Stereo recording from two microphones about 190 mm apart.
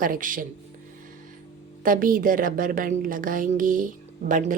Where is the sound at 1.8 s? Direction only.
45° right (ahead or behind).